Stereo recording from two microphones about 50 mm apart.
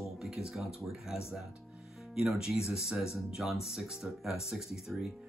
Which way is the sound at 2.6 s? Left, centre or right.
Left.